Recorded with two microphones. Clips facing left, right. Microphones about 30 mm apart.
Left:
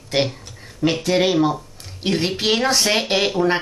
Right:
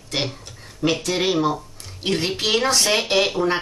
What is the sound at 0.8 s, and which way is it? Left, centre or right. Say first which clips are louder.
A woman's voice: left 3 dB; centre.